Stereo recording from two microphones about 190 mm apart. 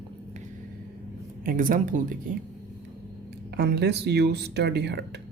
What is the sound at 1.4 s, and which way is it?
Speech, 45° right (ahead or behind).